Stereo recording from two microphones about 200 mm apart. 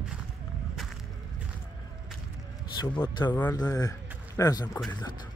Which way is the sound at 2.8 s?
20° left (ahead or behind).